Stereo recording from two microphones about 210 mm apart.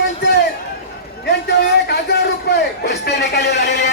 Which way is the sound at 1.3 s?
55° left (ahead or behind).